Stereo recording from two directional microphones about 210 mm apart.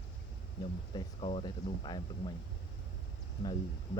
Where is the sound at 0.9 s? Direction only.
30° left (ahead or behind).